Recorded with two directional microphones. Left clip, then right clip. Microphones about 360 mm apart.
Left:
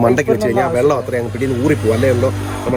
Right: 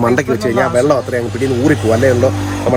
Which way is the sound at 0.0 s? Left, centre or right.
Centre.